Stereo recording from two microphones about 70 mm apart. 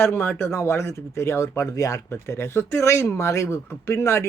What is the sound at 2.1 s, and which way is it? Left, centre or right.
Speech, left.